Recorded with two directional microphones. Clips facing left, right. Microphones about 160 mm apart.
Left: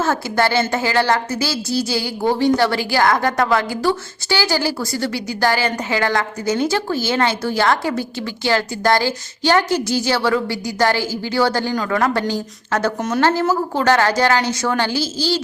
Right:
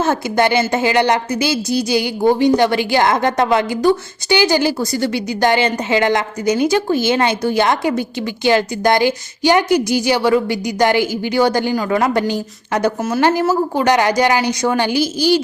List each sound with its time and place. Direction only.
0.0 s a woman's voice: 20° right (ahead or behind)